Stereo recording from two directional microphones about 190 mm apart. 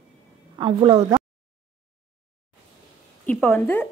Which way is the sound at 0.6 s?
25° right (ahead or behind).